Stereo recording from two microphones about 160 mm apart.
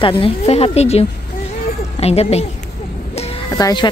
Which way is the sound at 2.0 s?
40° left (ahead or behind).